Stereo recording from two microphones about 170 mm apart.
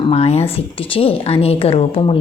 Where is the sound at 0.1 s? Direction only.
40° left (ahead or behind).